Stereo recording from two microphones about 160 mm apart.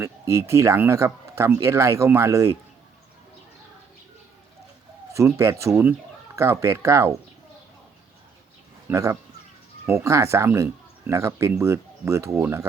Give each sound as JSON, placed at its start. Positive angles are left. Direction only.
{"t": 0.0, "sound": "speech", "side_deg": -15}
{"t": 5.1, "sound": "speech", "side_deg": -20}
{"t": 8.9, "sound": "speech", "side_deg": -20}